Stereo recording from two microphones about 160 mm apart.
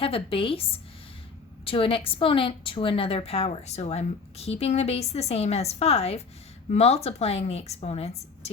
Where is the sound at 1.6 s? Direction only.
35° left (ahead or behind).